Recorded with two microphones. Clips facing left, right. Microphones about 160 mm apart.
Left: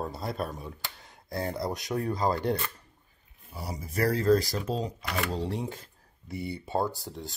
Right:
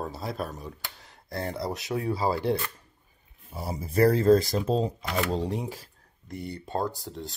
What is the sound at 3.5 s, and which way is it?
Speech, 25° right (ahead or behind).